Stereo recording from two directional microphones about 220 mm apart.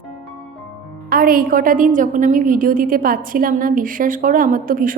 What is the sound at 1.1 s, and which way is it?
A woman's voice, 40° right (ahead or behind).